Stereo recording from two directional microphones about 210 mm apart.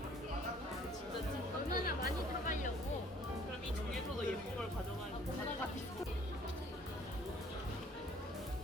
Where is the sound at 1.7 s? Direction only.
45° left (ahead or behind).